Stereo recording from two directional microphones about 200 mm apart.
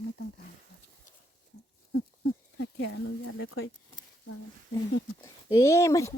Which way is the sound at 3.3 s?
80° left.